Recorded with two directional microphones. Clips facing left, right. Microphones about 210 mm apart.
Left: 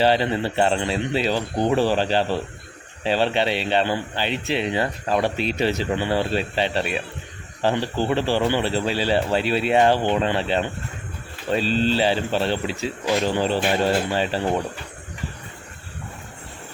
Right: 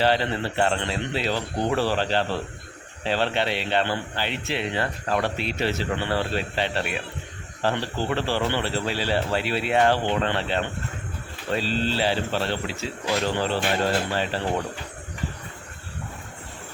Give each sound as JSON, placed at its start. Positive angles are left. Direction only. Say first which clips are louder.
{"t": 0.0, "sound": "speech", "louder": "left 3 dB", "side_deg": 15}